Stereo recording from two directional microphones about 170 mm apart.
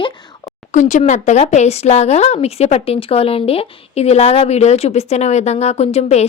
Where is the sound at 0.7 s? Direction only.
45° left (ahead or behind).